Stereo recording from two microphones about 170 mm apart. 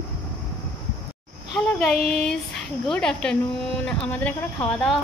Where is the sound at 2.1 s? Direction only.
5° left (ahead or behind).